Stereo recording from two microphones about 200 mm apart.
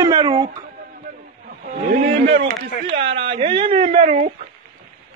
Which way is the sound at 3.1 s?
25° right (ahead or behind).